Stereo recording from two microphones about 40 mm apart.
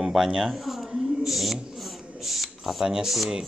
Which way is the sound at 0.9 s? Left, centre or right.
Centre.